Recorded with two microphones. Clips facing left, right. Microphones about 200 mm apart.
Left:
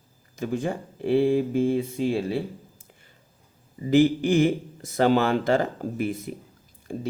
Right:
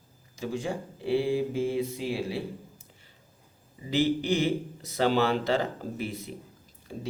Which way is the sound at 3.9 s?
50° left (ahead or behind).